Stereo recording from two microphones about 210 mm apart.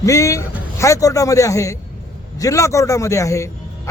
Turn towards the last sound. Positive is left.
turn(degrees=15)  # may be behind; listen again after turning